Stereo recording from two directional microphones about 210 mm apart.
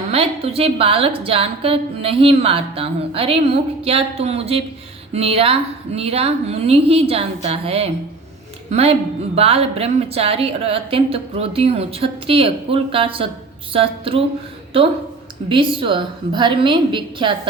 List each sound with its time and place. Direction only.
0.1 s a woman's voice: 30° right (ahead or behind)
15.4 s a woman's voice: 25° right (ahead or behind)